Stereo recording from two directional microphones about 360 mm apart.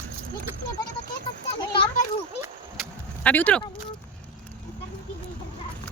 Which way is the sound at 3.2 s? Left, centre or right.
Centre.